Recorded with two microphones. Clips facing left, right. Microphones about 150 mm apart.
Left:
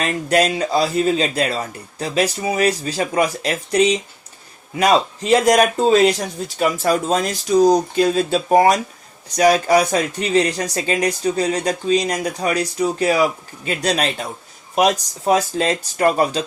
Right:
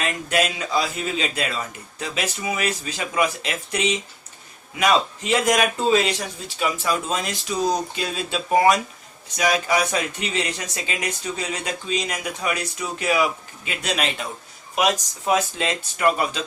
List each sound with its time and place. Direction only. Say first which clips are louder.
0.0 s speech: left 6 dB; 40° left (ahead or behind)